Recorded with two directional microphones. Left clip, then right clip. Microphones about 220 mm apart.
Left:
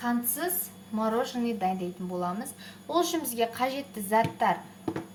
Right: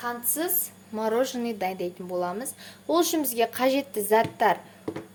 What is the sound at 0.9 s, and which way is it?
A woman's voice, 30° right (ahead or behind).